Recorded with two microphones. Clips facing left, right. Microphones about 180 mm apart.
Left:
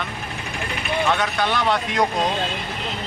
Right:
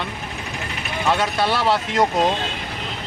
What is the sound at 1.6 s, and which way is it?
Speech, 5° right (ahead or behind).